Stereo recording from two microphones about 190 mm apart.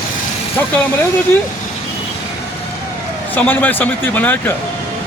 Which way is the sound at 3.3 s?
10° left (ahead or behind).